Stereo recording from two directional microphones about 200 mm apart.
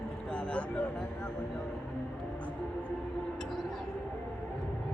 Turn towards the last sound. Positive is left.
turn(degrees=0)  # may be behind; listen again after turning